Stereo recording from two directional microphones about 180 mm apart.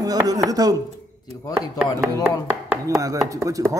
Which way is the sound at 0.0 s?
20° right (ahead or behind).